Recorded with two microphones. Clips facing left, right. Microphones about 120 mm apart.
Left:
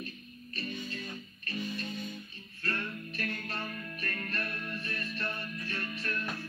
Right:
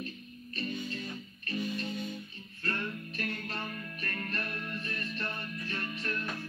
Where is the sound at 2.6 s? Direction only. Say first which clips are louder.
Right 1 dB; 20° right (ahead or behind).